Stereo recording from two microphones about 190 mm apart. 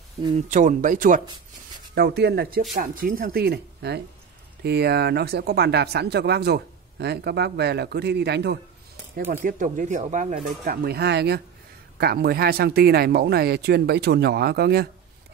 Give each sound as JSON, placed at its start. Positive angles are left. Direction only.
{"t": 0.5, "sound": "speech", "side_deg": -40}
{"t": 2.0, "sound": "speech", "side_deg": -60}
{"t": 9.3, "sound": "speech", "side_deg": -45}